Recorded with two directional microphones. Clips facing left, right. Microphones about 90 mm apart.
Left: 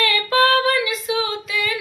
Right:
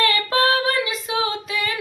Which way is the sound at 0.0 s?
30° right (ahead or behind).